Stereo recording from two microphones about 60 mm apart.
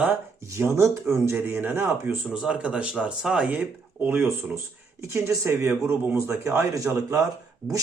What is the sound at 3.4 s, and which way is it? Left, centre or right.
Speech, right.